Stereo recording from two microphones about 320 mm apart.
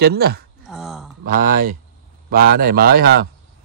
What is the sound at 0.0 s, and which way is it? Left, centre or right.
Speech, right.